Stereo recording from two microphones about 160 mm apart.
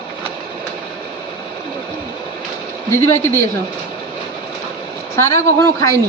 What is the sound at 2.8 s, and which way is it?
Speech, 15° left (ahead or behind).